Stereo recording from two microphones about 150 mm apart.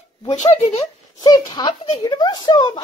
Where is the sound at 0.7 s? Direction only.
25° left (ahead or behind).